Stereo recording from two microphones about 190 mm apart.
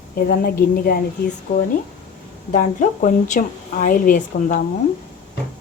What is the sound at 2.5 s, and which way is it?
A woman's voice, 40° left (ahead or behind).